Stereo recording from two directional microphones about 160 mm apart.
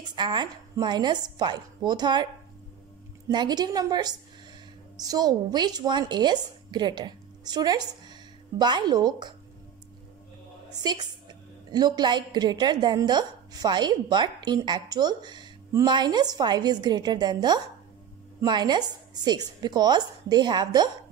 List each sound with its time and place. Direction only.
0.1 s a woman's voice: 30° right (ahead or behind)
3.3 s a woman's voice: 25° right (ahead or behind)
10.7 s a woman's voice: 25° right (ahead or behind)